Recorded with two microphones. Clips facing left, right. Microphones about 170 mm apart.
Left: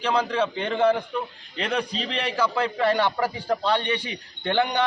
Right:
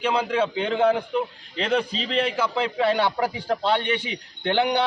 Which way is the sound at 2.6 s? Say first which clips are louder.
Right 1 dB; 10° right (ahead or behind).